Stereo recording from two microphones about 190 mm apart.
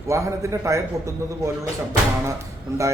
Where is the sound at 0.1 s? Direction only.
15° right (ahead or behind).